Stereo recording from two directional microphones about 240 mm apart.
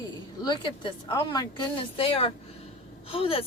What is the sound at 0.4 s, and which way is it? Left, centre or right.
Speech, centre.